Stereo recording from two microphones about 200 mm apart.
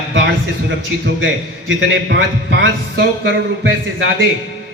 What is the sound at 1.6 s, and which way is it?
A man's voice, 60° right (ahead or behind).